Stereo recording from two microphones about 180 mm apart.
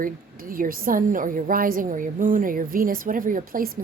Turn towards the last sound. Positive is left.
turn(degrees=-50)  # may be behind; listen again after turning